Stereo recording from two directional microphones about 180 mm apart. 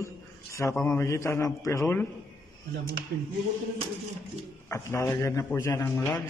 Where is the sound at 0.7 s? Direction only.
10° left (ahead or behind).